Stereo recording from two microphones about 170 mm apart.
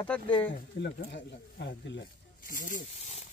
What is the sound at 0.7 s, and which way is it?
Speech, 90° left.